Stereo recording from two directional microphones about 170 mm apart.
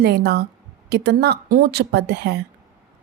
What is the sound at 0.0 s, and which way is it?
A woman's voice, 70° right (ahead or behind).